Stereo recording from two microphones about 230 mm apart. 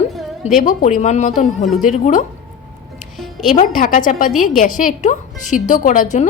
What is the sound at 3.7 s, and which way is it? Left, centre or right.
A woman's voice, left.